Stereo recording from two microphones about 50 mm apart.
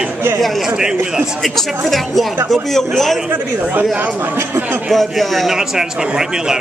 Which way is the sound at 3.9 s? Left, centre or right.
Right.